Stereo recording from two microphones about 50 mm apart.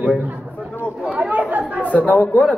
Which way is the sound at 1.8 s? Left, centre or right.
Left.